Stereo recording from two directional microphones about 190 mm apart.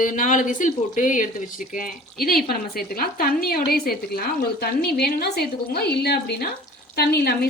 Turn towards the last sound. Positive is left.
turn(degrees=55)  # may be behind; listen again after turning